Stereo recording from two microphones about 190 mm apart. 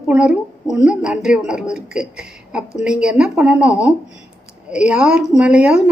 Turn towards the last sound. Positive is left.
turn(degrees=-5)  # may be behind; listen again after turning